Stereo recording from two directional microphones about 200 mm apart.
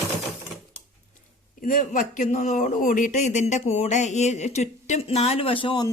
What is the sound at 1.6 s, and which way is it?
Speech, 40° left (ahead or behind).